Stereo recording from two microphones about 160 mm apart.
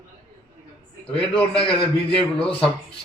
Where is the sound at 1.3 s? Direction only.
35° left (ahead or behind).